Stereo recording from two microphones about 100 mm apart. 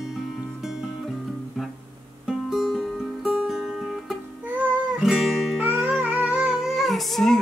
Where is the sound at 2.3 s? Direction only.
5° right (ahead or behind).